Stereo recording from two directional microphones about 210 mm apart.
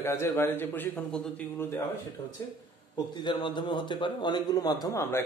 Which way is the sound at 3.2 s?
20° left (ahead or behind).